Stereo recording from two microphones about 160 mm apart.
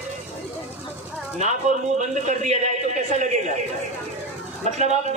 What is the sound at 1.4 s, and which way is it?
A man's voice, 45° right (ahead or behind).